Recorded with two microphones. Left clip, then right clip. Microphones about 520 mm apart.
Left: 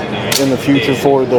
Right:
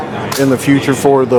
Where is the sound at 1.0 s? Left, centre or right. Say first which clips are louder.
Right 2 dB; right.